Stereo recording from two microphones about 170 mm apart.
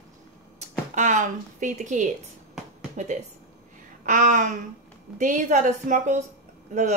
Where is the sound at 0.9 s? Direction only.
45° right (ahead or behind).